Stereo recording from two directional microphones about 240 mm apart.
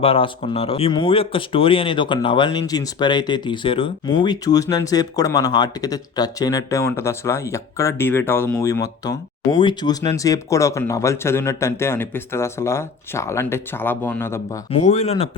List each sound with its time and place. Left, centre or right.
0.0 s speech: left
14.7 s speech: left